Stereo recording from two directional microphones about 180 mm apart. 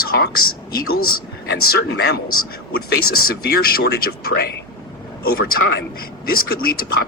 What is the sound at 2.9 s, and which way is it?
Speech, 55° left (ahead or behind).